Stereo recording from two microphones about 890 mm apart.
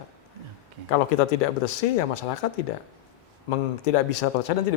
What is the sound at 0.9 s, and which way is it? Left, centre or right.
Speech, left.